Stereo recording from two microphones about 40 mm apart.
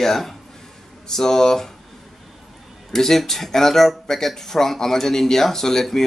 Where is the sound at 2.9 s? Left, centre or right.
Centre.